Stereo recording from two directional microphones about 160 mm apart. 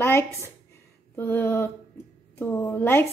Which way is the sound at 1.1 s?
15° left (ahead or behind).